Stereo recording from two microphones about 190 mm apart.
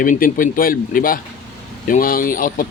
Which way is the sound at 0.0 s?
45° left (ahead or behind).